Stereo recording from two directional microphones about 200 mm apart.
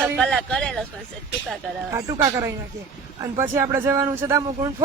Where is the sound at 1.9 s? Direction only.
15° right (ahead or behind).